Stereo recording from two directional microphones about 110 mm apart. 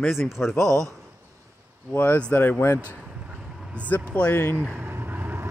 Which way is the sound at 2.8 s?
15° right (ahead or behind).